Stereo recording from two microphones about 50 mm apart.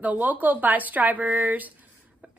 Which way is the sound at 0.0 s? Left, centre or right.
Right.